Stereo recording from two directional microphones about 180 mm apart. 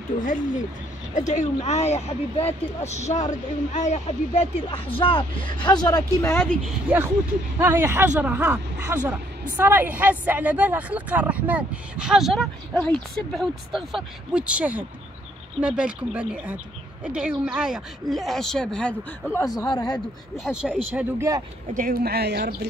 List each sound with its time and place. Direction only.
1.1 s speech: 45° left (ahead or behind); by 6.4 s 20° left (ahead or behind)
6.9 s speech: 10° right (ahead or behind)
19.3 s speech: 20° left (ahead or behind)
20.4 s speech: 5° right (ahead or behind)
21.7 s speech: 55° right (ahead or behind)